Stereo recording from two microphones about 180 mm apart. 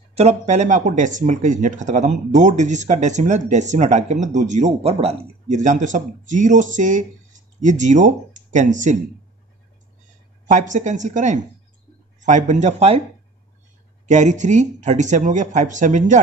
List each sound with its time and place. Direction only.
0.2 s speech: 40° right (ahead or behind)
10.5 s speech: 45° right (ahead or behind)
14.0 s speech: 40° right (ahead or behind)